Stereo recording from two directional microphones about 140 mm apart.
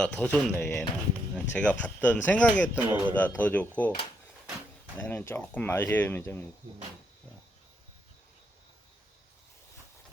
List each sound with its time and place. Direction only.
0.0 s speech: 5° left (ahead or behind)
4.9 s speech: 15° left (ahead or behind)